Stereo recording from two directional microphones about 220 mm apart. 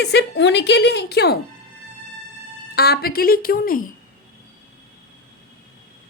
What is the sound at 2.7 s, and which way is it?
Speech, 45° left (ahead or behind).